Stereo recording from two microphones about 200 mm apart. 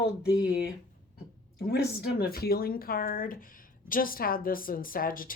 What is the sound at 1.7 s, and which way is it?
A woman's voice, 50° left (ahead or behind).